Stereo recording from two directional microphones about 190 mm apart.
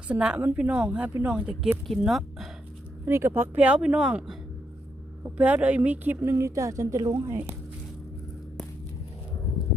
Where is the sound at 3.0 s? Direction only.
15° right (ahead or behind).